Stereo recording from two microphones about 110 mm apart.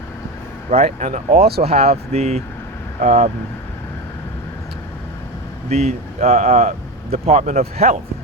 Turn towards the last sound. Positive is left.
turn(degrees=-90)